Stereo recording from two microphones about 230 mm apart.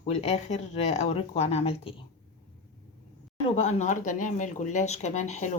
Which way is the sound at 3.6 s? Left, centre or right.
Left.